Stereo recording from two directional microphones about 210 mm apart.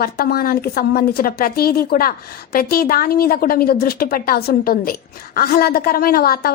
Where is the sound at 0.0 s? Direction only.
45° left (ahead or behind).